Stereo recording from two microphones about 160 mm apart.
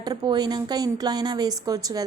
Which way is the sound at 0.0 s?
25° right (ahead or behind).